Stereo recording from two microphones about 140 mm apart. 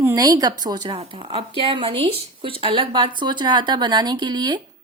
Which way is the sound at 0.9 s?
40° right (ahead or behind).